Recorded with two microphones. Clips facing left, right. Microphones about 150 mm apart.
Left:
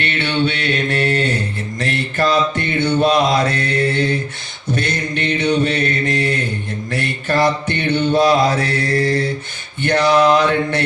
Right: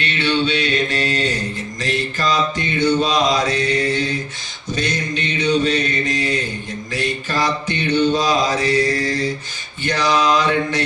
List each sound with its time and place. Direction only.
0.0 s mantra: 55° left (ahead or behind)